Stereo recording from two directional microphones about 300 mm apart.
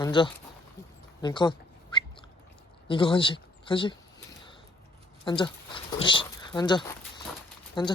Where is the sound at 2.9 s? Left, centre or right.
Centre.